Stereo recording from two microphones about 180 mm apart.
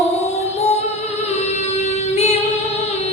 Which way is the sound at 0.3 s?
35° left (ahead or behind).